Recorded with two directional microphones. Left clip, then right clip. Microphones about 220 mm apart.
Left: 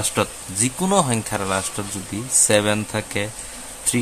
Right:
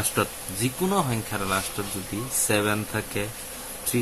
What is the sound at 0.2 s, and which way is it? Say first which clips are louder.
Speech: left 4 dB; 40° left (ahead or behind).